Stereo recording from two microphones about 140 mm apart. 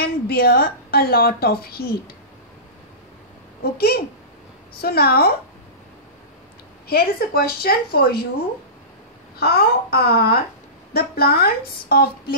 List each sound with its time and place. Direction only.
0.0 s a woman's voice: 90° left
3.6 s a woman's voice: 90° left
6.9 s a woman's voice: 90° left
9.6 s a woman's voice: 90° left